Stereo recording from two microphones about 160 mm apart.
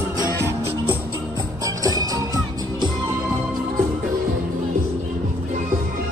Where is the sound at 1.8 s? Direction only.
25° right (ahead or behind).